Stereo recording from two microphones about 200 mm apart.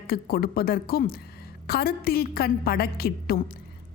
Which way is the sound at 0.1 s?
50° left (ahead or behind).